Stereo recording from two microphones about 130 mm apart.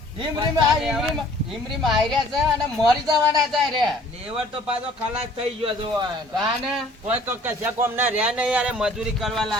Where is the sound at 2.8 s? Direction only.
30° right (ahead or behind).